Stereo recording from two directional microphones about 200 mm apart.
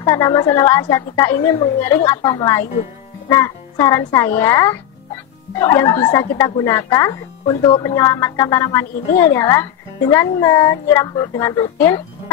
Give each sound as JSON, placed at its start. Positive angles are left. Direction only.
{"t": 0.0, "sound": "speech", "side_deg": 15}